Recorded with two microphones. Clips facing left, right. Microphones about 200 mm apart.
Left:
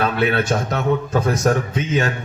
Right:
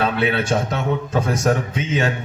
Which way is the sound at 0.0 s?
25° right (ahead or behind).